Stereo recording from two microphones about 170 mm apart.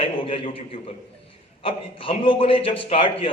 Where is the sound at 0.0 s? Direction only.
35° left (ahead or behind).